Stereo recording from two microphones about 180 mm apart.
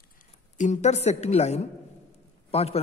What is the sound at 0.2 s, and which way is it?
A woman's voice, 45° left (ahead or behind).